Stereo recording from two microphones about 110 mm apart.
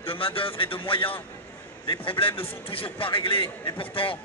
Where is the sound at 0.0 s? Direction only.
55° left (ahead or behind).